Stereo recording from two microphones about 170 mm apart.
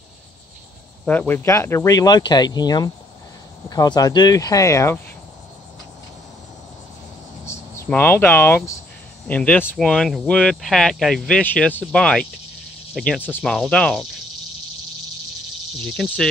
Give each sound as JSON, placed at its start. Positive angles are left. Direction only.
{"t": 1.0, "sound": "speech", "side_deg": 10}
{"t": 7.4, "sound": "speech", "side_deg": 15}
{"t": 15.8, "sound": "speech", "side_deg": 0}